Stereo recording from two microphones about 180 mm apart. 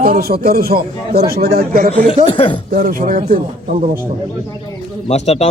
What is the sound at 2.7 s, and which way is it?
Speech, 50° right (ahead or behind).